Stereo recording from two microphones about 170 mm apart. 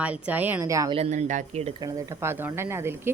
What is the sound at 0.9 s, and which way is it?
Speech, 45° right (ahead or behind).